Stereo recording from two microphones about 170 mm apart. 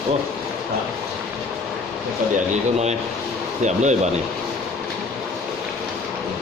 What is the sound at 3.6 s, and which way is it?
Speech, 45° right (ahead or behind).